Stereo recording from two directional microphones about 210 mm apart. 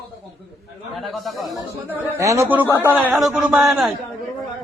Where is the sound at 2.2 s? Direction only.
15° right (ahead or behind).